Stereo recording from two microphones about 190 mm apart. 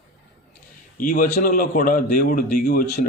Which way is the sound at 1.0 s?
45° left (ahead or behind).